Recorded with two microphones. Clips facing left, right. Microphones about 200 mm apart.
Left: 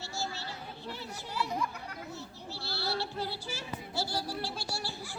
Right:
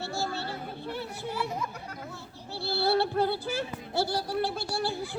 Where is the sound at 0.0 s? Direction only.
55° right (ahead or behind).